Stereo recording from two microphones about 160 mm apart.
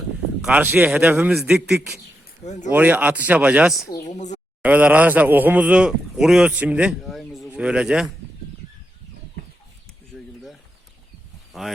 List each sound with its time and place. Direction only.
0.4 s speech: 10° right (ahead or behind)
1.3 s a man's voice: centre (ahead or behind)
2.4 s speech: 45° left (ahead or behind)
2.7 s speech: 10° right (ahead or behind)
3.9 s a sound: 45° left (ahead or behind)
4.6 s speech: 10° right (ahead or behind)